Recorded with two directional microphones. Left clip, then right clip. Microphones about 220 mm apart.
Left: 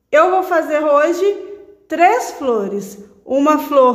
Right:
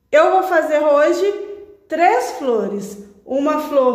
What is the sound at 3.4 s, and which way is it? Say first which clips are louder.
Speech: left 4 dB; 30° left (ahead or behind).